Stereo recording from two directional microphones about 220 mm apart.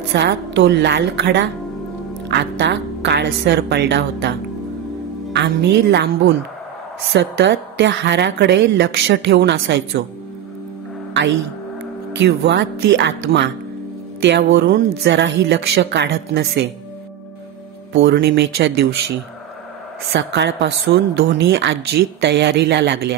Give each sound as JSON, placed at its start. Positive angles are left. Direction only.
{"t": 0.1, "sound": "a woman's voice", "side_deg": -50}
{"t": 12.2, "sound": "a woman's voice", "side_deg": -50}
{"t": 18.0, "sound": "a woman's voice", "side_deg": -50}
{"t": 20.2, "sound": "a woman's voice", "side_deg": -55}